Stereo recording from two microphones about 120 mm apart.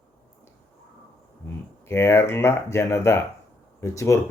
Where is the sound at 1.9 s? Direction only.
20° left (ahead or behind).